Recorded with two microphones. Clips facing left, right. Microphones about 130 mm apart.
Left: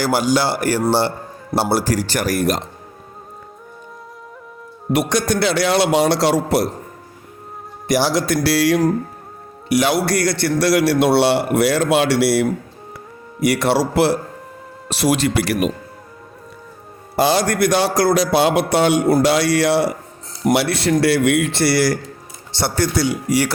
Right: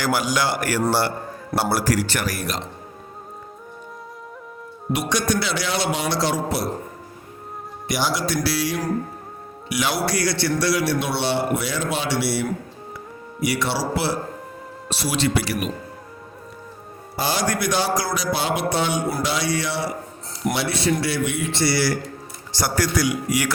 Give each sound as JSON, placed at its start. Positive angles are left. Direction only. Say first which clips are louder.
{"t": 0.0, "sound": "a man's voice", "louder": "left 5 dB", "side_deg": 35}
{"t": 4.9, "sound": "a man's voice", "louder": "left 5 dB", "side_deg": 60}
{"t": 6.1, "sound": "music", "louder": "left 6 dB", "side_deg": 65}
{"t": 7.9, "sound": "speech", "louder": "left 6 dB", "side_deg": 50}
{"t": 8.4, "sound": "music", "louder": "left 8 dB", "side_deg": 70}
{"t": 9.7, "sound": "a man's voice", "louder": "left 6 dB", "side_deg": 50}
{"t": 13.4, "sound": "a man's voice", "louder": "left 7 dB", "side_deg": 55}
{"t": 17.2, "sound": "a man's voice", "louder": "left 7 dB", "side_deg": 65}
{"t": 18.8, "sound": "a man's voice", "louder": "left 8 dB", "side_deg": 65}
{"t": 19.2, "sound": "music", "louder": "left 8 dB", "side_deg": 70}
{"t": 20.5, "sound": "a man's voice", "louder": "left 6 dB", "side_deg": 65}
{"t": 22.5, "sound": "a man's voice", "louder": "left 3 dB", "side_deg": 30}